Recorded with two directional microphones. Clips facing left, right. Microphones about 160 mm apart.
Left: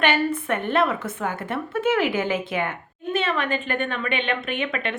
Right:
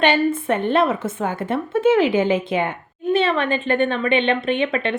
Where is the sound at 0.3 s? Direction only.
25° right (ahead or behind).